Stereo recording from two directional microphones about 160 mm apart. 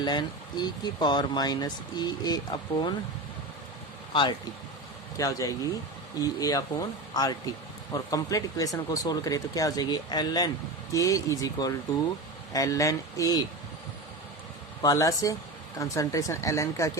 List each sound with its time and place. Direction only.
0.0 s speech: 25° left (ahead or behind)
4.1 s speech: 30° left (ahead or behind)
14.8 s speech: 25° left (ahead or behind)